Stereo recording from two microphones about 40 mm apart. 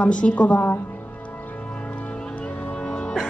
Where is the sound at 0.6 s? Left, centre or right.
Left.